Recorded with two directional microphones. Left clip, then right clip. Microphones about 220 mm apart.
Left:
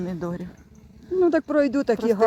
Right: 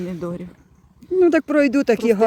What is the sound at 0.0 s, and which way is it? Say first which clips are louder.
Speech: right 2 dB; centre (ahead or behind).